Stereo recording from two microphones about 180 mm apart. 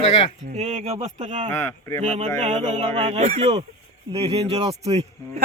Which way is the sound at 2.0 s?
40° right (ahead or behind).